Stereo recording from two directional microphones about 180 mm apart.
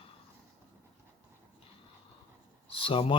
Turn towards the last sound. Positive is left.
turn(degrees=30)  # may be behind; listen again after turning